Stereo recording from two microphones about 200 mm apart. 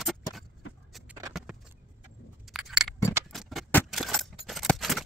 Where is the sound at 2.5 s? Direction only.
Centre (ahead or behind).